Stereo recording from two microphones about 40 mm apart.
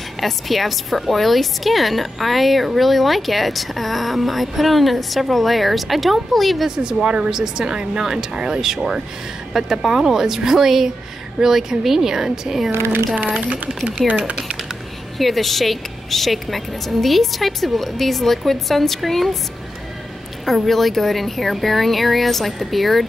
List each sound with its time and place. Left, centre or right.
0.2 s a woman's voice: centre
6.8 s a woman's voice: right
13.1 s speech: right
15.1 s a woman's voice: centre
20.4 s a woman's voice: centre